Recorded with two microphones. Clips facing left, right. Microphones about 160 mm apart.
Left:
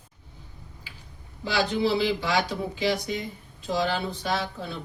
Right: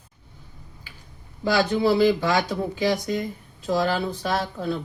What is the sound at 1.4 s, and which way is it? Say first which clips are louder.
A man's voice: right 4 dB; 45° right (ahead or behind).